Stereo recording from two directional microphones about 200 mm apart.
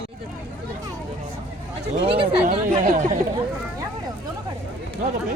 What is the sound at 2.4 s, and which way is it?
Speech, 40° right (ahead or behind).